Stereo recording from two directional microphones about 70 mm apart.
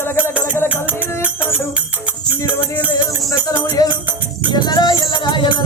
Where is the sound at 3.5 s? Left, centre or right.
Left.